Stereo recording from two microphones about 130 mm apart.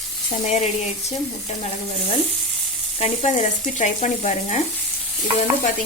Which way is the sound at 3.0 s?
55° left (ahead or behind).